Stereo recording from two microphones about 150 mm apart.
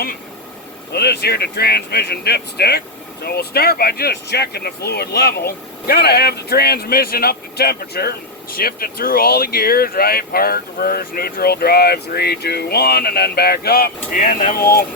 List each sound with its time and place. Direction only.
0.9 s speech: 90° left